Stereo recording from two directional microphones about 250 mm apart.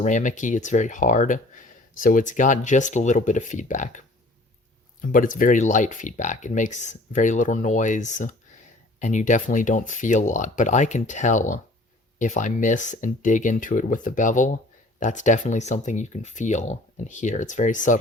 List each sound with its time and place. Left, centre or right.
0.0 s speech: left
5.1 s speech: left